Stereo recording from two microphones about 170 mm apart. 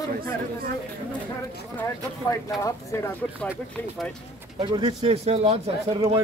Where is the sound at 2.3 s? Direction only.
20° left (ahead or behind).